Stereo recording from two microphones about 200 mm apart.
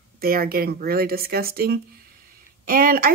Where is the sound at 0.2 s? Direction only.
50° right (ahead or behind).